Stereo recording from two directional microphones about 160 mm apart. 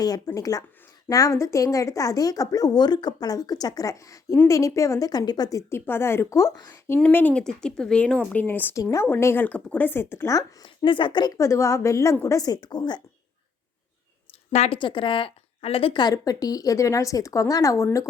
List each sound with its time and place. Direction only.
0.0 s a woman's voice: 25° left (ahead or behind)
14.5 s a woman's voice: 45° left (ahead or behind)
14.8 s speech: 30° left (ahead or behind)